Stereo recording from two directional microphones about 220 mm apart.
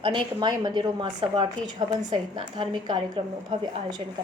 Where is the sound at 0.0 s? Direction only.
20° right (ahead or behind).